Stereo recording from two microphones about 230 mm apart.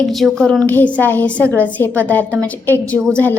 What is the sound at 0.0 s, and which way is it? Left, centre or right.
A woman's voice, centre.